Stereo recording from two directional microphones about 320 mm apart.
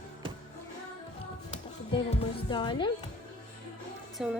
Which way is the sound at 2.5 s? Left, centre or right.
Centre.